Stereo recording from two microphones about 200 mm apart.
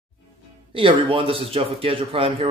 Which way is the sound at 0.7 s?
25° right (ahead or behind).